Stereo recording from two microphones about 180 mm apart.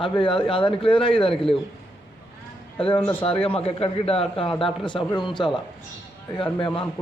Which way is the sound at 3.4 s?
30° left (ahead or behind).